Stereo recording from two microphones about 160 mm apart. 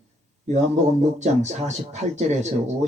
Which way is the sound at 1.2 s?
45° right (ahead or behind).